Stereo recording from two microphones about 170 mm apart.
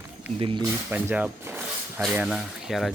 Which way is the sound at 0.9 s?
10° right (ahead or behind).